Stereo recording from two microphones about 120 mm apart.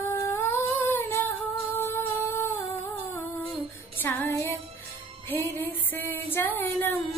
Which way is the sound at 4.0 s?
15° left (ahead or behind).